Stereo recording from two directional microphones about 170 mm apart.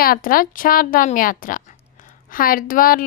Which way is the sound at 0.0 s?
60° left (ahead or behind).